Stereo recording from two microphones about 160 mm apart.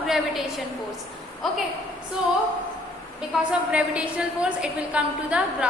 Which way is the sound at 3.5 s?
5° right (ahead or behind).